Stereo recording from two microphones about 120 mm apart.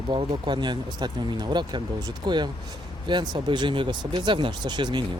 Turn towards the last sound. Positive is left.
turn(degrees=-40)  # may be behind; listen again after turning